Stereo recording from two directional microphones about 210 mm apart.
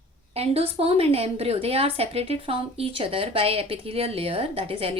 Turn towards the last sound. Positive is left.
turn(degrees=-25)  # may be behind; listen again after turning